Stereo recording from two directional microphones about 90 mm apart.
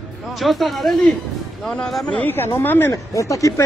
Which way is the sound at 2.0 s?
20° left (ahead or behind).